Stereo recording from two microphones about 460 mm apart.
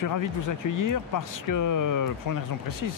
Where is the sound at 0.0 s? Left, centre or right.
Left.